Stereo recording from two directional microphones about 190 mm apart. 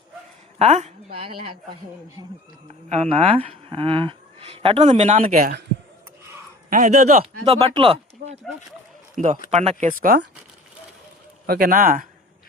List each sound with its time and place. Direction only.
0.6 s speech: 35° right (ahead or behind)
2.9 s speech: 30° right (ahead or behind); by 5.6 s 55° right (ahead or behind)
6.7 s speech: 35° right (ahead or behind)
9.5 s speech: 35° right (ahead or behind)
11.4 s speech: 50° right (ahead or behind)